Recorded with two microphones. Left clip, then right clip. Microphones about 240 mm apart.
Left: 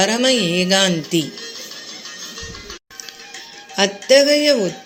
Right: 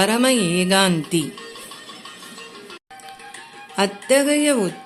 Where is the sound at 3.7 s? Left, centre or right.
Centre.